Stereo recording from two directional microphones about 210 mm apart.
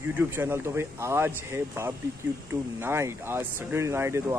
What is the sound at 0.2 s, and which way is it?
Speech, 10° right (ahead or behind).